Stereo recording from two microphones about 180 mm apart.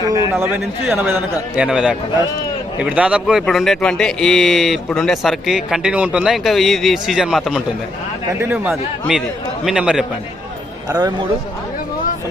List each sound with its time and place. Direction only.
0.3 s a man's voice: 10° right (ahead or behind)
10.8 s a man's voice: 20° right (ahead or behind)